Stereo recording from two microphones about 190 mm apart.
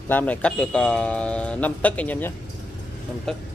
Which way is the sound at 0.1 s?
10° left (ahead or behind).